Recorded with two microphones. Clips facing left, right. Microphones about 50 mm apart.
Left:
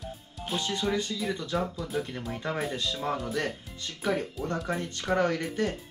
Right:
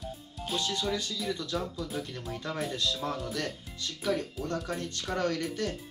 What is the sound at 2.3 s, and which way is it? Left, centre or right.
Speech, left.